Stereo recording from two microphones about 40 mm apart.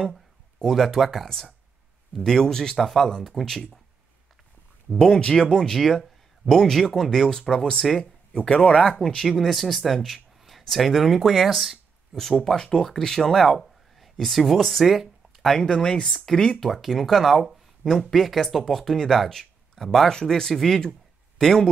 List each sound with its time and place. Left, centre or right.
0.0 s speech: centre
2.8 s speech: centre
4.9 s speech: centre
8.0 s speech: left
9.0 s speech: centre
12.4 s speech: centre
15.6 s speech: centre
16.5 s speech: centre